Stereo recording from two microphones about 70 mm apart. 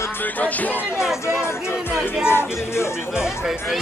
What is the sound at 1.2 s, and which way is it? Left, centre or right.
Music, left.